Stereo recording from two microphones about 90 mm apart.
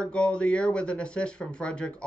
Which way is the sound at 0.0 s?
10° left (ahead or behind).